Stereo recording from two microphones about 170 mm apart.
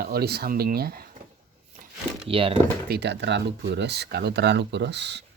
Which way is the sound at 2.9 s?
80° right.